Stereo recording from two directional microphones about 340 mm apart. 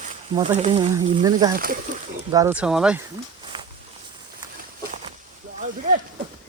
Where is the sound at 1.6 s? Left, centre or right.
Right.